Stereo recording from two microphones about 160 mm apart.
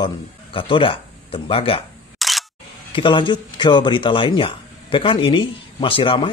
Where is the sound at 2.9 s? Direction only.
30° left (ahead or behind).